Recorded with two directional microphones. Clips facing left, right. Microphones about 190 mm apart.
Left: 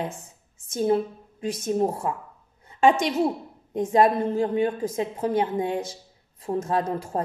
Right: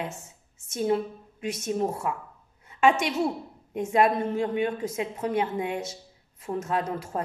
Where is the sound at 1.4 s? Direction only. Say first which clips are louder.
Left 4 dB; 35° left (ahead or behind).